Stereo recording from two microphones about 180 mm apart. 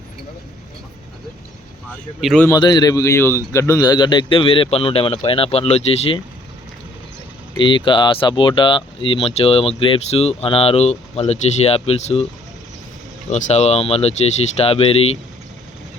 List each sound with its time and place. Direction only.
2.2 s a man's voice: centre (ahead or behind)
2.5 s a man's voice: 25° left (ahead or behind)
7.6 s speech: 25° left (ahead or behind)
13.3 s speech: 35° left (ahead or behind)